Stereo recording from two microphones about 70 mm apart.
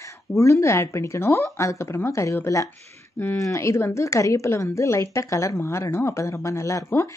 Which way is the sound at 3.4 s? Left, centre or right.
Left.